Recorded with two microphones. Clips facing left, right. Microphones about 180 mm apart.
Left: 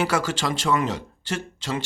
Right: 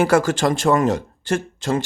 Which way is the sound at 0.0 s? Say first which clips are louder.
Right 7 dB; 50° right (ahead or behind).